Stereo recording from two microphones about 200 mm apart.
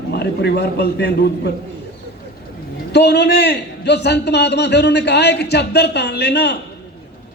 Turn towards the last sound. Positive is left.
turn(degrees=55)  # may be behind; listen again after turning